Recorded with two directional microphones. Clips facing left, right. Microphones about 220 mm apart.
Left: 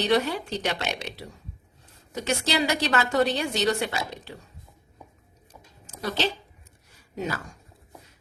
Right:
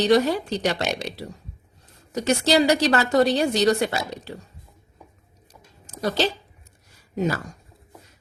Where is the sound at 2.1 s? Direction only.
40° right (ahead or behind).